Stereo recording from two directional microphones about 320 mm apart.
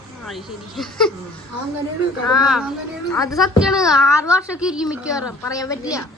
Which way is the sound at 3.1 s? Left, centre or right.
Centre.